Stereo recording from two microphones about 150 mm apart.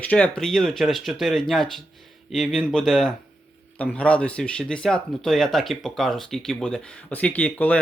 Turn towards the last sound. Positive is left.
turn(degrees=10)  # may be behind; listen again after turning